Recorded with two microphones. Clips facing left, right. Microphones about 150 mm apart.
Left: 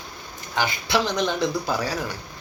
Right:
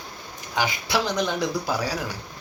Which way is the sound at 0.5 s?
10° right (ahead or behind).